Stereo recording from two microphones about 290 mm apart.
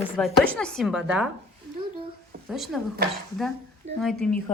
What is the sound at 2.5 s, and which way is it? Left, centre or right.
Speech, centre.